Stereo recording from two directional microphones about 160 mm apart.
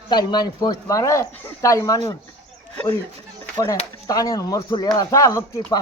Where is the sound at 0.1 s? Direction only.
25° left (ahead or behind).